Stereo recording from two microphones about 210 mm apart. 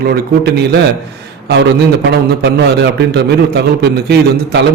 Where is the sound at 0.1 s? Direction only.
50° right (ahead or behind).